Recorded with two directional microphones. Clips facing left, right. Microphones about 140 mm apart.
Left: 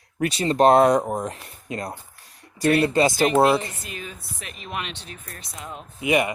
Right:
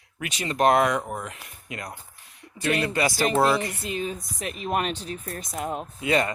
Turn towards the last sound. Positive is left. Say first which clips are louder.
# left 2 dB
turn(degrees=15)  # may be behind; listen again after turning